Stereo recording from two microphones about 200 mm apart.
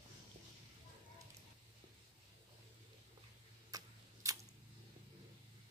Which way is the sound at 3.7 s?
15° right (ahead or behind).